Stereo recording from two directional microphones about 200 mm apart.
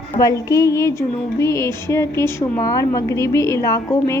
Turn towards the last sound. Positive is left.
turn(degrees=15)  # may be behind; listen again after turning